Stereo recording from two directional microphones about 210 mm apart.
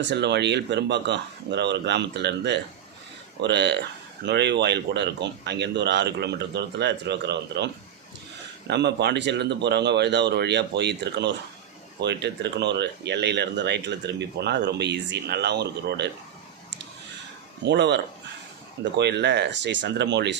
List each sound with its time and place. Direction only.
0.0 s speech: 55° right (ahead or behind)
17.7 s speech: 55° right (ahead or behind)